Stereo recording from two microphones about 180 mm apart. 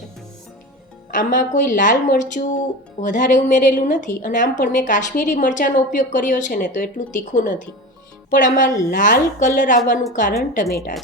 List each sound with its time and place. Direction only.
1.1 s a woman's voice: 45° left (ahead or behind)